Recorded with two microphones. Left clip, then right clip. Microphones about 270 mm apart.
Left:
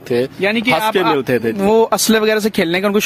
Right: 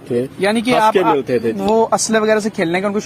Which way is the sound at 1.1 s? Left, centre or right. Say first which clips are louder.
Left 1 dB; left.